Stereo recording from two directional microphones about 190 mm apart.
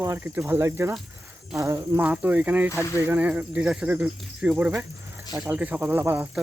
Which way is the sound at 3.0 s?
10° right (ahead or behind).